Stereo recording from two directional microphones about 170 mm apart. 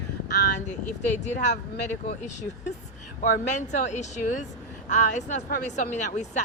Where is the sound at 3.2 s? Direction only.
50° left (ahead or behind).